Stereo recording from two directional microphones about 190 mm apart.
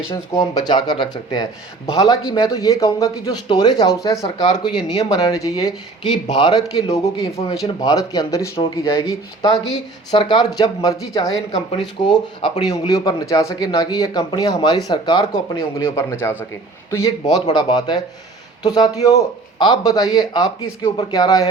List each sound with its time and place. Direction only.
0.1 s speech: 20° left (ahead or behind)
4.2 s speech: 35° left (ahead or behind)
4.5 s speech: 20° left (ahead or behind)
6.8 s speech: 35° left (ahead or behind)
7.5 s speech: 20° left (ahead or behind)